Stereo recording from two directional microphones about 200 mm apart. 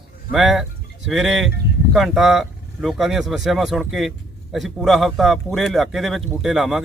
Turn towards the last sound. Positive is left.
turn(degrees=0)  # may be behind; listen again after turning